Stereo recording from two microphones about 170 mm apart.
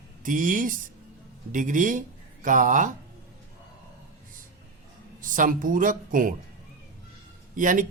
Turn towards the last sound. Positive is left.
turn(degrees=-50)  # may be behind; listen again after turning